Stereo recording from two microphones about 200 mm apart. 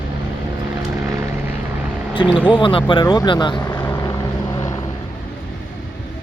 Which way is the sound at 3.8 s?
15° left (ahead or behind).